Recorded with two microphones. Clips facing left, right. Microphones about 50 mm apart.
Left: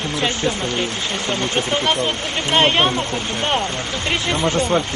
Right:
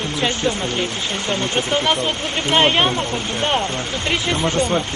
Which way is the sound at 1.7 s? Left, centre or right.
Centre.